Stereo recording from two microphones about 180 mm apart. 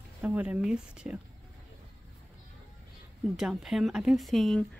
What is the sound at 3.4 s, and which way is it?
Speech, centre (ahead or behind).